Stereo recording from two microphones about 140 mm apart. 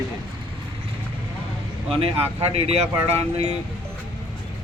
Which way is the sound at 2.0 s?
45° right (ahead or behind).